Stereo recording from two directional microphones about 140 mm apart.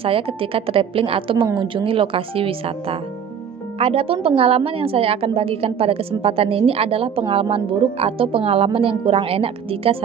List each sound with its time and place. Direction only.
0.0 s a woman's voice: 40° right (ahead or behind)